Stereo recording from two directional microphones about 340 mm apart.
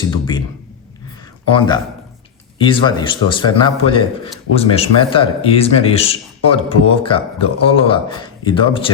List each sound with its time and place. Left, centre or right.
0.1 s a man's voice: centre
1.5 s a man's voice: centre